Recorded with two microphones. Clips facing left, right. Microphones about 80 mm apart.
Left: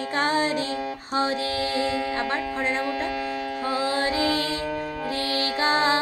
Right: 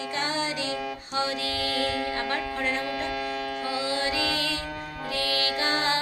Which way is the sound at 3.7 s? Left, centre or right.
Left.